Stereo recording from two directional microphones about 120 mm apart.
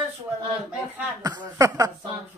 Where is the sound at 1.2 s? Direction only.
30° right (ahead or behind).